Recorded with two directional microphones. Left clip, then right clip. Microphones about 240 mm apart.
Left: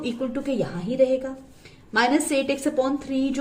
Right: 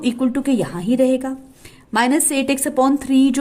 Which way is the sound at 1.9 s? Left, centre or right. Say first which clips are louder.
Right 3 dB; right.